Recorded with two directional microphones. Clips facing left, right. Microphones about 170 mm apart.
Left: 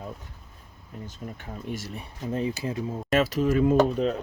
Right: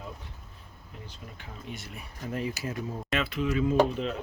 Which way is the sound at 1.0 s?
45° left (ahead or behind).